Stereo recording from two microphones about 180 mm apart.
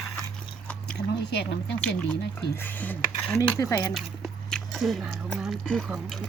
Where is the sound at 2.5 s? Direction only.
10° left (ahead or behind).